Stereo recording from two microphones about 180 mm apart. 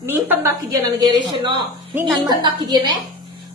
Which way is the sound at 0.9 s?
25° right (ahead or behind).